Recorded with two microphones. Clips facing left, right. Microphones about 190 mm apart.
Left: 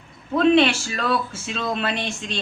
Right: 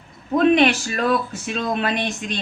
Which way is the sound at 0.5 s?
15° right (ahead or behind).